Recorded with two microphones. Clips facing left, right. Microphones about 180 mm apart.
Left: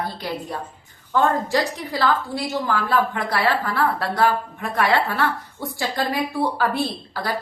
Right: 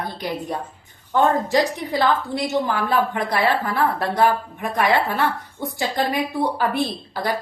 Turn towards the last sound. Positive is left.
turn(degrees=-20)  # may be behind; listen again after turning